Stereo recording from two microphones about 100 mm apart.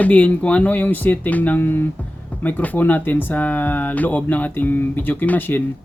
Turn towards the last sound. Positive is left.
turn(degrees=20)  # may be behind; listen again after turning